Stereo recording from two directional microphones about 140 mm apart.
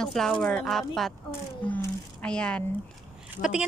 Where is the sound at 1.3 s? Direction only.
15° left (ahead or behind).